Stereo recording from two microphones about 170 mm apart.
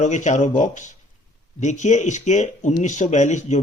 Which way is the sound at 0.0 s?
45° left (ahead or behind).